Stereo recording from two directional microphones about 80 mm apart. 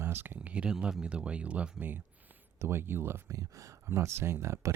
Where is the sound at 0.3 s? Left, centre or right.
Centre.